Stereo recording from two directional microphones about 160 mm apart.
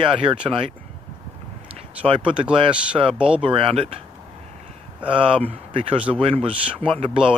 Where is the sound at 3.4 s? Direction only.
35° right (ahead or behind).